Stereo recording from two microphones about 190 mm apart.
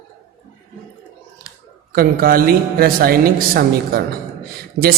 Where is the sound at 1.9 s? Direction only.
50° right (ahead or behind).